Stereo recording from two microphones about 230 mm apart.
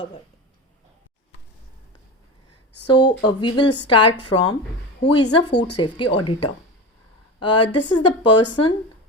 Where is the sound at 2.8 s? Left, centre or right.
Centre.